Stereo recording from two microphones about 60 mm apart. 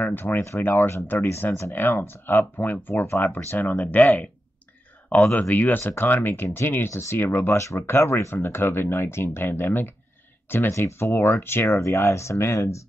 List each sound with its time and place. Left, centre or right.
0.0 s speech: left
5.3 s speech: left
11.8 s speech: left